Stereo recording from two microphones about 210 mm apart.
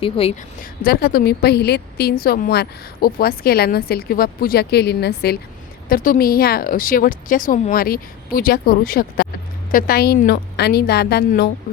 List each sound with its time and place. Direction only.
0.0 s speech: 25° left (ahead or behind)
0.6 s a woman's voice: 45° left (ahead or behind)